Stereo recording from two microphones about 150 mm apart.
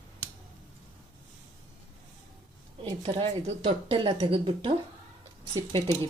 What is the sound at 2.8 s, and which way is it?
Speech, 35° right (ahead or behind).